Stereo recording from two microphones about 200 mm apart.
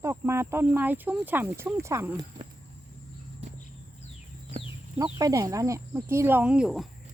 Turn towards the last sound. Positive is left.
turn(degrees=0)  # may be behind; listen again after turning